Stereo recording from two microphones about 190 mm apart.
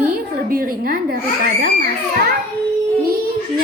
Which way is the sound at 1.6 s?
50° right (ahead or behind).